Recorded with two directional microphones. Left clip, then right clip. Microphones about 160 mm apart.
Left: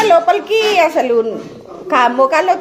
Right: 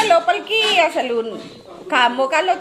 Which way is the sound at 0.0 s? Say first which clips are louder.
Left 4 dB; 15° left (ahead or behind).